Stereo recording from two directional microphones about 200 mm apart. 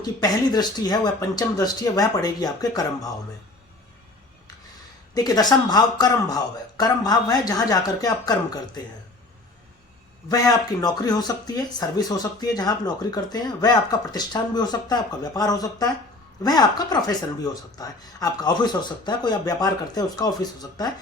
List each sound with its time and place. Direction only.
0.0 s speech: 20° left (ahead or behind)
5.1 s speech: 20° left (ahead or behind)
10.2 s speech: 20° left (ahead or behind)